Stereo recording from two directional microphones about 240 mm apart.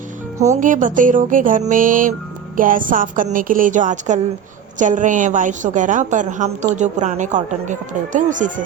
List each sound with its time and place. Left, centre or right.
0.5 s a woman's voice: right